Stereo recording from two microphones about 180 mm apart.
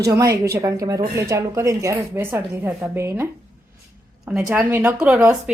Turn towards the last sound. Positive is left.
turn(degrees=-5)  # may be behind; listen again after turning